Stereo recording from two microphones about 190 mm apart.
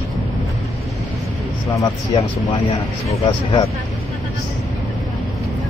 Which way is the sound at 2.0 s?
30° left (ahead or behind).